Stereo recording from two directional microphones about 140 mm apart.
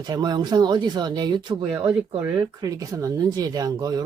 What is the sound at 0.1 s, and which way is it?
Speech, 30° right (ahead or behind).